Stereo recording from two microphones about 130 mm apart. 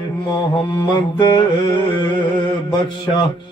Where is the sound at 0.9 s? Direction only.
35° left (ahead or behind).